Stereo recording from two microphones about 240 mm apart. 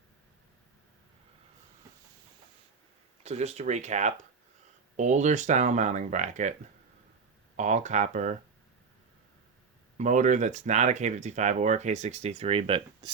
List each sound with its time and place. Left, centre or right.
3.2 s speech: right
7.5 s speech: right
10.0 s speech: right